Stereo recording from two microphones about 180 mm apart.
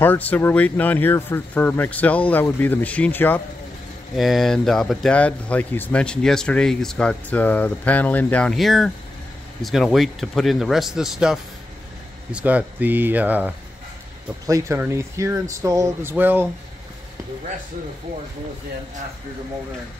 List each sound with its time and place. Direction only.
0.0 s speech: 10° left (ahead or behind)
4.1 s speech: centre (ahead or behind)